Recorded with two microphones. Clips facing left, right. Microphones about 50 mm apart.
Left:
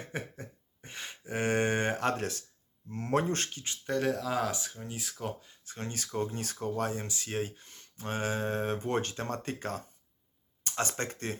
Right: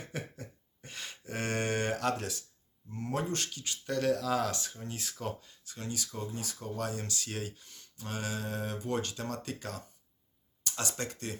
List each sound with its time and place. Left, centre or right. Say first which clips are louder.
0.1 s a sound: left 2 dB; left
2.9 s speech: left 5 dB; left; by 5.3 s centre
5.6 s speech: even; left